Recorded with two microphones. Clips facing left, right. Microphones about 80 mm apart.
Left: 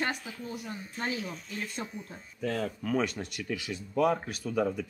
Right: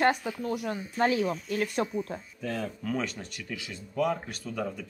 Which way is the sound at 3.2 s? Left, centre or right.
Centre.